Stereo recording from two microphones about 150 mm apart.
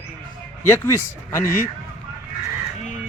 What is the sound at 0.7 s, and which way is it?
Speech, 20° left (ahead or behind).